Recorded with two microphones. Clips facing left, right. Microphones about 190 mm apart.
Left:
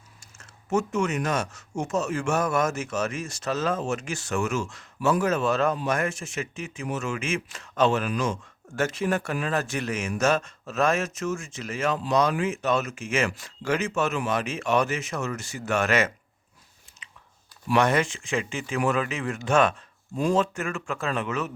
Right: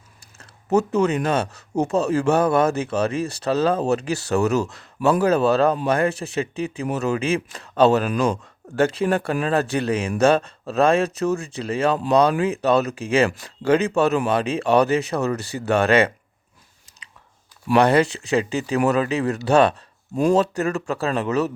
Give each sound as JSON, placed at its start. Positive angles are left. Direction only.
{"t": 0.3, "sound": "speech", "side_deg": -35}
{"t": 17.7, "sound": "speech", "side_deg": -35}